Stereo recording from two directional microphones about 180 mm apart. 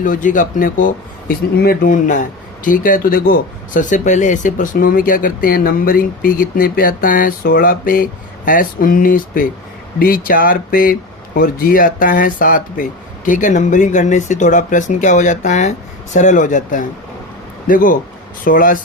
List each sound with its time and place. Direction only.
0.0 s speech: 45° left (ahead or behind)